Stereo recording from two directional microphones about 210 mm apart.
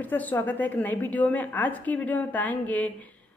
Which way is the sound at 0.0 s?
10° left (ahead or behind).